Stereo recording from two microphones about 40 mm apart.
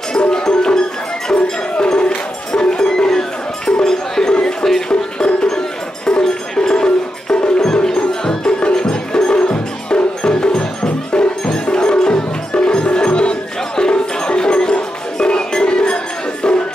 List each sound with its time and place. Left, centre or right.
0.1 s music: left
6.5 s music: centre